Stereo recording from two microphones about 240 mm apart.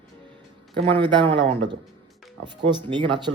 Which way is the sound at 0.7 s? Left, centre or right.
Right.